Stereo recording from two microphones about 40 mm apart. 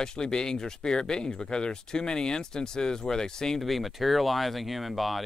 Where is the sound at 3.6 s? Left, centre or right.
Centre.